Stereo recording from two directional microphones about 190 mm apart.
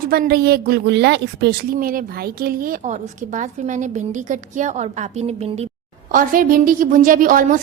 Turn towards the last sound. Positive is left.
turn(degrees=-45)  # may be behind; listen again after turning